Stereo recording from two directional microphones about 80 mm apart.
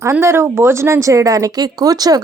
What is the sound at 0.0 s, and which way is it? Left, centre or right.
A woman's voice, right.